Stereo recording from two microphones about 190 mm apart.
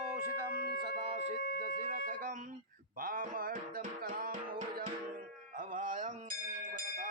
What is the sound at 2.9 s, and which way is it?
Music, 45° right (ahead or behind).